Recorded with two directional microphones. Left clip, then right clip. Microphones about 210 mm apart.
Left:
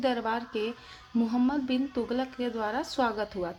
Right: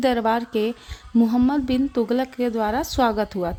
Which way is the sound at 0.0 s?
40° right (ahead or behind).